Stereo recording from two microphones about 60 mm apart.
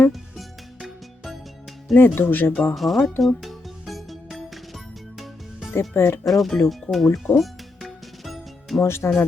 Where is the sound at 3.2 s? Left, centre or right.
Centre.